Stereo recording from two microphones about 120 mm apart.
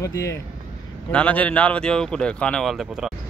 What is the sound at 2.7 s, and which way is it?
Speech, 5° right (ahead or behind).